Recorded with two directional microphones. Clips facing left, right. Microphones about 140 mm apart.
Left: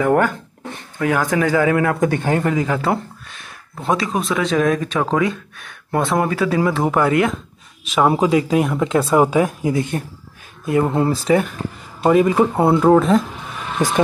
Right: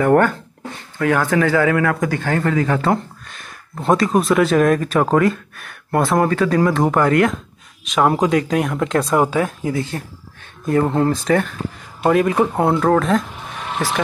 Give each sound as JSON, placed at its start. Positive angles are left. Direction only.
{"t": 0.0, "sound": "a man's voice", "side_deg": 10}
{"t": 10.6, "sound": "a man's voice", "side_deg": 10}
{"t": 13.8, "sound": "speech", "side_deg": 20}